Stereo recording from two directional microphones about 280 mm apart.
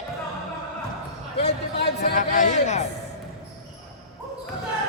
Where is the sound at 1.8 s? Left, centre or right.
Left.